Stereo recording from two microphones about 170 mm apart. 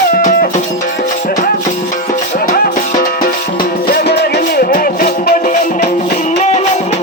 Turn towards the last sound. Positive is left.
turn(degrees=60)  # may be behind; listen again after turning